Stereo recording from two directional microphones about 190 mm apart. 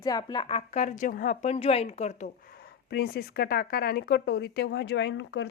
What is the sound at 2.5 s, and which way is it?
A woman's voice, 55° left (ahead or behind).